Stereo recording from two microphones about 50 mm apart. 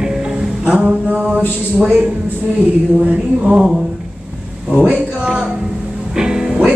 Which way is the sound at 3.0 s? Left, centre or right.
Right.